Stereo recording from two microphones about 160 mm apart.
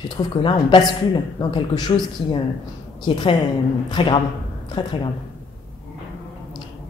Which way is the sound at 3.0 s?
30° left (ahead or behind).